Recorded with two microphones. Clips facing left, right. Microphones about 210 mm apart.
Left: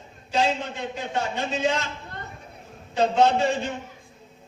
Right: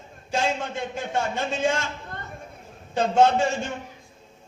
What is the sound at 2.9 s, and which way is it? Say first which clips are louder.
Speech: right 1 dB; 50° right (ahead or behind).